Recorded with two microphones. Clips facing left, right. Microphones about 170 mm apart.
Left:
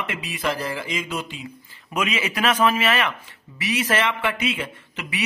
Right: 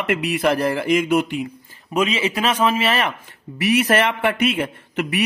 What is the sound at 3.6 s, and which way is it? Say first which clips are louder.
A man's voice: right 6 dB; 55° right (ahead or behind).